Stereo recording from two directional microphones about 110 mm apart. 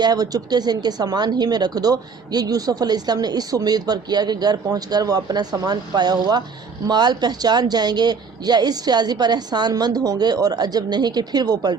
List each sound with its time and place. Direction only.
0.0 s a woman's voice: 35° right (ahead or behind)